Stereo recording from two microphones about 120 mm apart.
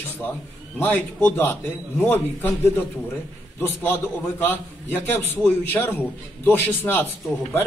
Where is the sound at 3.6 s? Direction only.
15° left (ahead or behind).